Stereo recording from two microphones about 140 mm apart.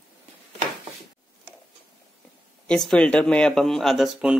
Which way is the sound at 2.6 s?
5° left (ahead or behind).